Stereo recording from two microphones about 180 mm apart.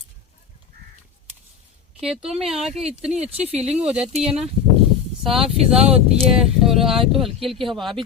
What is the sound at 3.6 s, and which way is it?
Speech, 35° right (ahead or behind).